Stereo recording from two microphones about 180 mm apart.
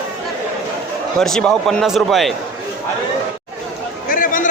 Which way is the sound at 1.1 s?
5° left (ahead or behind).